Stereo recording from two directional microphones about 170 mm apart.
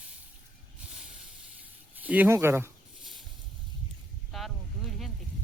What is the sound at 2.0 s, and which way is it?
Speech, 10° right (ahead or behind).